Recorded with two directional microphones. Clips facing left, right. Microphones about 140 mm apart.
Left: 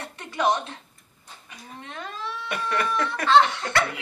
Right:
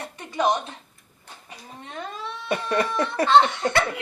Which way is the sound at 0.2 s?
15° right (ahead or behind).